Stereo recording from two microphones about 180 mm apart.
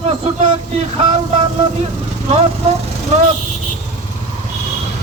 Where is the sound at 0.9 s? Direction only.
35° right (ahead or behind).